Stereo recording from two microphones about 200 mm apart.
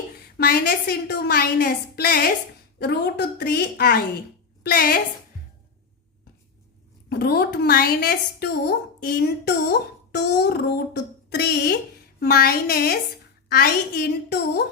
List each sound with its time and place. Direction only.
0.3 s a woman's voice: 50° left (ahead or behind)
7.1 s a woman's voice: 50° left (ahead or behind)